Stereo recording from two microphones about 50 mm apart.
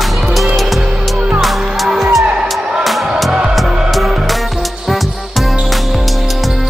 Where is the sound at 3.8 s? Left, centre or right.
Centre.